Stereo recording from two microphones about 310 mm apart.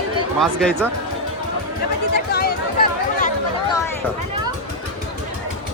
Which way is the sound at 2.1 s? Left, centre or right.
Left.